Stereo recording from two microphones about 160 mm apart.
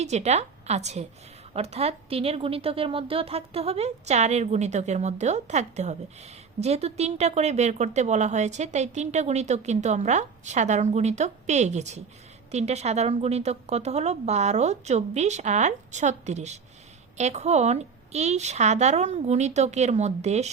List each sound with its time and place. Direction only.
0.0 s a woman's voice: 45° right (ahead or behind)